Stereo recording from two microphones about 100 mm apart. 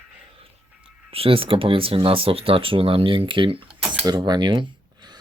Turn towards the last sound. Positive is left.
turn(degrees=-50)  # may be behind; listen again after turning